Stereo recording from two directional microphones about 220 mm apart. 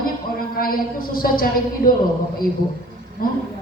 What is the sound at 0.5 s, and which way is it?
A man's voice, 40° left (ahead or behind).